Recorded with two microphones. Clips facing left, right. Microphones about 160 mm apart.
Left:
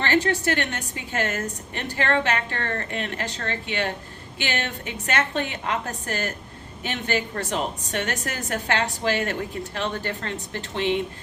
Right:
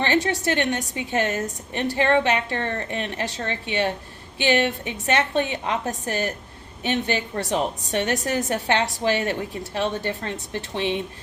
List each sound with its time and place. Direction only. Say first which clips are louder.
0.0 s a woman's voice: even; 20° right (ahead or behind)